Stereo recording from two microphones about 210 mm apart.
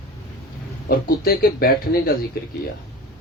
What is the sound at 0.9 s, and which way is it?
A man's voice, 45° left (ahead or behind).